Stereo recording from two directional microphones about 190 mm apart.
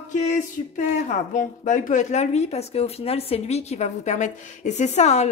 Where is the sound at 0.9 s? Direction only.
40° left (ahead or behind).